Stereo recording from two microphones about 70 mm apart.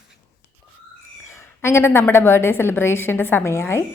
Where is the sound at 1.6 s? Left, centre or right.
Left.